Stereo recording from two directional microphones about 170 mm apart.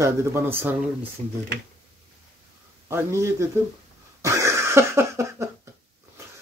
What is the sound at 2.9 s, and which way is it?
Speech, 15° right (ahead or behind).